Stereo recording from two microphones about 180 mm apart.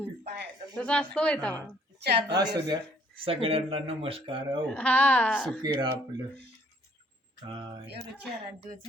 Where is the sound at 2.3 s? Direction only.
20° right (ahead or behind).